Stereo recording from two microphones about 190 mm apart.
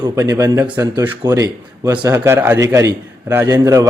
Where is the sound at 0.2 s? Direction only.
15° right (ahead or behind).